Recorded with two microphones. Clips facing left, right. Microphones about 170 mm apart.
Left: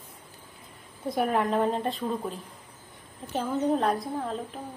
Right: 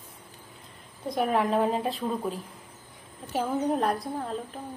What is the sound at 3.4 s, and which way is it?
Speech, 5° right (ahead or behind).